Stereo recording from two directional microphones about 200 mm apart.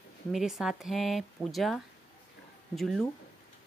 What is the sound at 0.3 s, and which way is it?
Speech, centre (ahead or behind).